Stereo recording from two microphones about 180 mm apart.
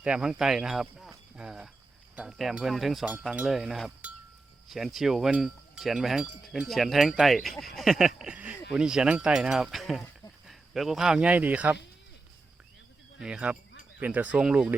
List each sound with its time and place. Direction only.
0.0 s speech: 5° right (ahead or behind)
2.1 s cowbell: 5° right (ahead or behind)
10.4 s speech: centre (ahead or behind)
13.1 s speech: 5° right (ahead or behind)